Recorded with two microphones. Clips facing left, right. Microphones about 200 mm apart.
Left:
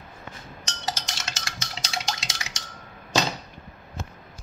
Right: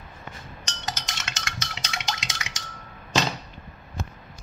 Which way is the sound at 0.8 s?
30° left (ahead or behind).